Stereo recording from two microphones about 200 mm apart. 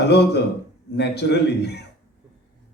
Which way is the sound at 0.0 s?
55° left (ahead or behind).